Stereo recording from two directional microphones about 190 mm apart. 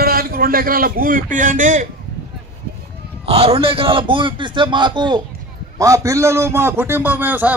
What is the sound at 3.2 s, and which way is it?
A man's voice, 30° right (ahead or behind).